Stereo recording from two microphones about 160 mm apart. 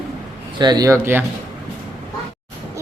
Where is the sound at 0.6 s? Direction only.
25° right (ahead or behind).